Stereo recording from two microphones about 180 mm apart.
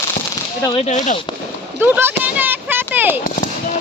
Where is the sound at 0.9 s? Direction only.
45° left (ahead or behind).